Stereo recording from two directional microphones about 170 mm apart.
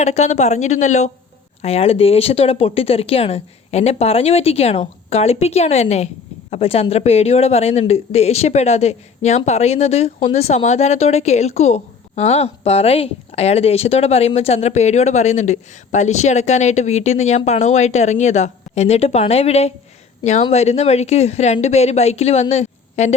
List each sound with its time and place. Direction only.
0.0 s a woman's voice: 40° left (ahead or behind)